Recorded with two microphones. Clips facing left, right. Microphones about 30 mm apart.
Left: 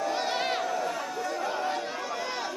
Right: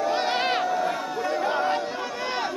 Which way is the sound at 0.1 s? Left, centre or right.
Right.